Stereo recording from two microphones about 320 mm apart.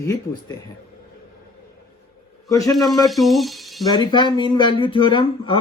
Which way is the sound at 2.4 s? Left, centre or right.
Centre.